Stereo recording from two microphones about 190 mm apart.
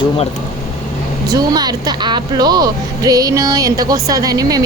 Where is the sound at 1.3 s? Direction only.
20° right (ahead or behind).